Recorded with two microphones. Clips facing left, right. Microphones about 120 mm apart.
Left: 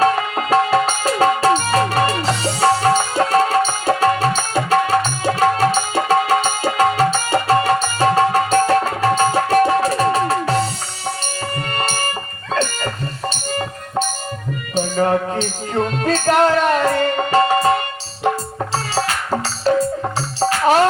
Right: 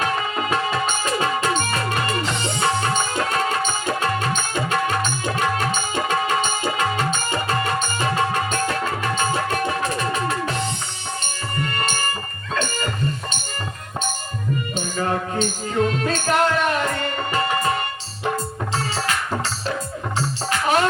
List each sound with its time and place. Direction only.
0.5 s music: 35° left (ahead or behind)
14.8 s music: 35° left (ahead or behind)
19.7 s music: 40° left (ahead or behind)